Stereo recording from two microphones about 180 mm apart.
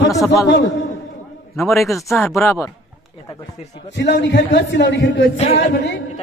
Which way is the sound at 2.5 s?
15° left (ahead or behind).